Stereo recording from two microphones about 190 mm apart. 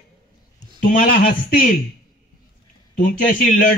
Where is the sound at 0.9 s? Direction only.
50° left (ahead or behind).